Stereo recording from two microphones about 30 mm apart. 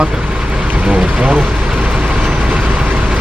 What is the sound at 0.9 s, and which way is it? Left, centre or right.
Speech, right.